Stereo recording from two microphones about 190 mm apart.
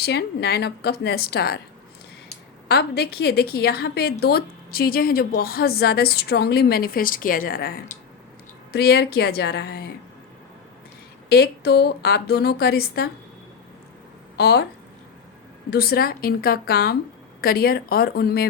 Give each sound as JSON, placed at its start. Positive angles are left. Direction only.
{"t": 0.0, "sound": "a woman's voice", "side_deg": 60}
{"t": 2.6, "sound": "a woman's voice", "side_deg": 60}
{"t": 8.7, "sound": "a woman's voice", "side_deg": 60}
{"t": 11.3, "sound": "a woman's voice", "side_deg": 60}
{"t": 14.3, "sound": "speech", "side_deg": 60}
{"t": 15.7, "sound": "a woman's voice", "side_deg": 50}